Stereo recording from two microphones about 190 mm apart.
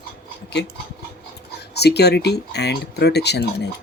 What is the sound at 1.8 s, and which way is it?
Speech, 60° left (ahead or behind).